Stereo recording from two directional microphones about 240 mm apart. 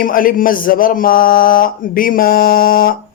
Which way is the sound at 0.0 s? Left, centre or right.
Left.